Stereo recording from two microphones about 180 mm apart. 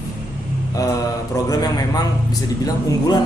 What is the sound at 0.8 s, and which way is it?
A man's voice, 20° left (ahead or behind).